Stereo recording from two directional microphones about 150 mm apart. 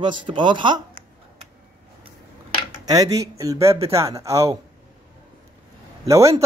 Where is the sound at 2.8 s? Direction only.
25° right (ahead or behind).